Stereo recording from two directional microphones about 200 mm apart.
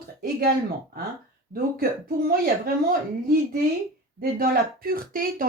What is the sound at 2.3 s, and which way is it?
Speech, 50° right (ahead or behind).